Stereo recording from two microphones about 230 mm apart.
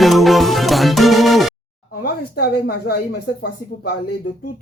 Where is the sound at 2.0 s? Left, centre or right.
Left.